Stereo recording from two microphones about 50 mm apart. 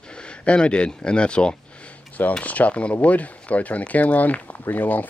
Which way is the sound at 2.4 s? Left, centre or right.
Left.